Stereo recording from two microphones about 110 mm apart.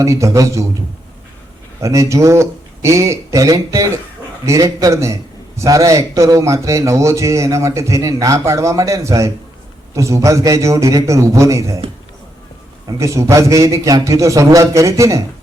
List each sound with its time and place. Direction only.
0.0 s speech: 30° right (ahead or behind)
1.8 s speech: 30° right (ahead or behind)
12.9 s speech: 30° right (ahead or behind)